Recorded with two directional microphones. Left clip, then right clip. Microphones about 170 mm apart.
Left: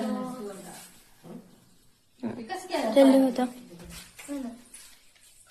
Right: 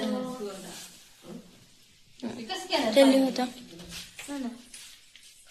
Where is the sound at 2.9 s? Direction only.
25° left (ahead or behind).